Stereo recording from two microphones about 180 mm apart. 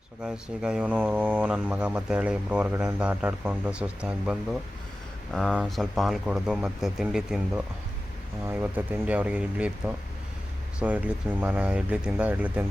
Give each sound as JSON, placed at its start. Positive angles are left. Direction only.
{"t": 0.2, "sound": "speech", "side_deg": -5}